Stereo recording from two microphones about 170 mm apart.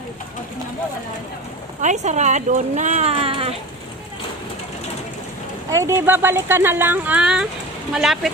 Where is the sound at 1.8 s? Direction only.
45° right (ahead or behind).